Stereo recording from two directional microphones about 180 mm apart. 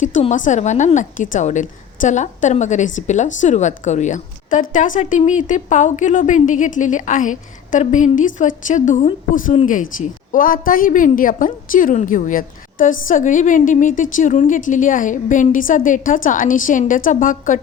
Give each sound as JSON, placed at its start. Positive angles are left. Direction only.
{"t": 0.0, "sound": "a woman's voice", "side_deg": 40}